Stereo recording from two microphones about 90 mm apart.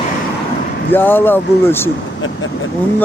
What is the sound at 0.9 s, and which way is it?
Speech, 25° left (ahead or behind).